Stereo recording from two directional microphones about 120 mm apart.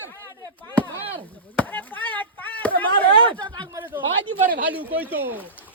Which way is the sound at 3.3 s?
40° right (ahead or behind).